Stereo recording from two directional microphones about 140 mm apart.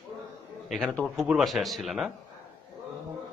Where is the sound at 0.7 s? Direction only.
5° left (ahead or behind).